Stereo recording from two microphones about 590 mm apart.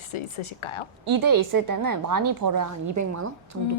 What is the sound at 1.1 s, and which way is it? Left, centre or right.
A woman's voice, right.